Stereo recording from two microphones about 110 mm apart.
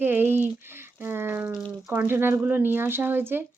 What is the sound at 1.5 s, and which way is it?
Speech, centre (ahead or behind).